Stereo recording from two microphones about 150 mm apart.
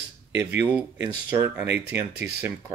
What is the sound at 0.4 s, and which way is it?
Speech, 15° right (ahead or behind).